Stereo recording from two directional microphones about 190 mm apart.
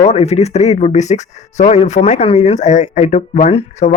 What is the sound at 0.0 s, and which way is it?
Speech, 35° left (ahead or behind).